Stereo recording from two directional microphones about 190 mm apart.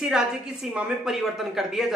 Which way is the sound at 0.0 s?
Centre (ahead or behind).